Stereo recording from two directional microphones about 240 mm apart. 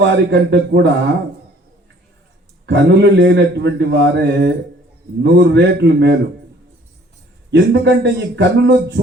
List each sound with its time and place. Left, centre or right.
0.0 s speech: right
2.6 s speech: right
7.5 s speech: right